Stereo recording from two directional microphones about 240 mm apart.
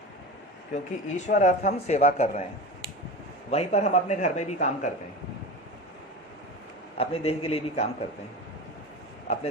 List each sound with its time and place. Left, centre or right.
0.7 s speech: left
3.5 s speech: left
6.9 s speech: left
9.2 s speech: left